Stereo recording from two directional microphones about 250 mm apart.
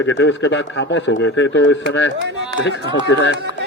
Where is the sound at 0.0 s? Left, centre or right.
Left.